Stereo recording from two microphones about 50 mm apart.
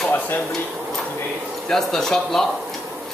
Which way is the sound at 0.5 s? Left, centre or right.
Centre.